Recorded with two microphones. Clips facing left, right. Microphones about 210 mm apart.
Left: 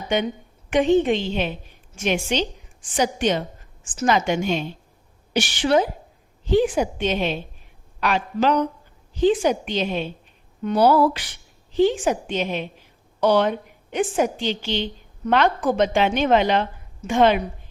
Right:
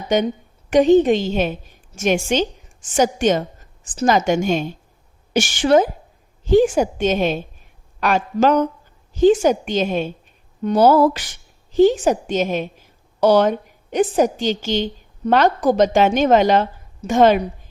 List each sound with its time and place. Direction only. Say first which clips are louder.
0.1 s a woman's voice: right 5 dB; 40° right (ahead or behind)